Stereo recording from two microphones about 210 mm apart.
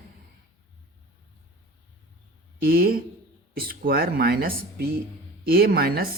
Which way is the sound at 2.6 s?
45° right (ahead or behind).